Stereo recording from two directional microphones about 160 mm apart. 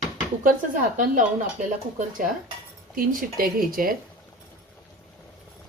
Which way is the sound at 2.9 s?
60° right (ahead or behind).